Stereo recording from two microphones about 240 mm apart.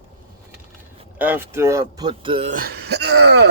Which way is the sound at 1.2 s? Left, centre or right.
Centre.